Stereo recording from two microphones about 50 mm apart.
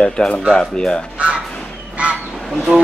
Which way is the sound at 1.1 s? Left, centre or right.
Right.